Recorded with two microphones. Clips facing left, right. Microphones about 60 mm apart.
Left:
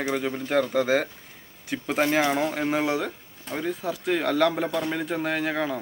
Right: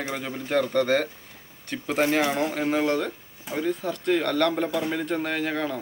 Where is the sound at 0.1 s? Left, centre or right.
Centre.